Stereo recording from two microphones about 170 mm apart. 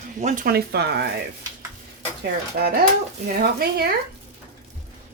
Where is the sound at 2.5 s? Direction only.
65° right (ahead or behind).